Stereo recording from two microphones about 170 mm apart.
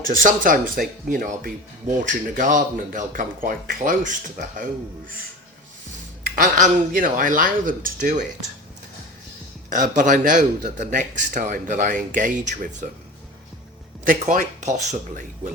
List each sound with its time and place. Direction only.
0.1 s speech: 55° right (ahead or behind)
6.2 s speech: 55° right (ahead or behind)
9.6 s speech: 50° right (ahead or behind)
14.0 s speech: 50° right (ahead or behind)